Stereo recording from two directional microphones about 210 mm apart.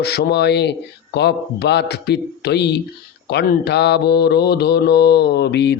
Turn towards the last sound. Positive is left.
turn(degrees=55)  # may be behind; listen again after turning